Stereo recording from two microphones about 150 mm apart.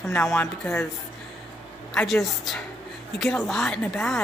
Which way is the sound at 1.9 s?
Centre (ahead or behind).